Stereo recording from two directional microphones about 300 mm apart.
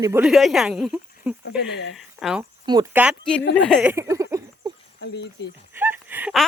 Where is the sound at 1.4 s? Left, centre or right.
Left.